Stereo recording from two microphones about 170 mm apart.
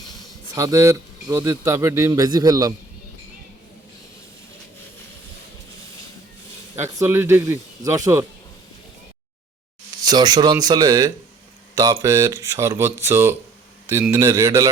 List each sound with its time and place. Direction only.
0.5 s a man's voice: 20° right (ahead or behind)
6.7 s a man's voice: 15° right (ahead or behind)
10.0 s speech: 25° right (ahead or behind)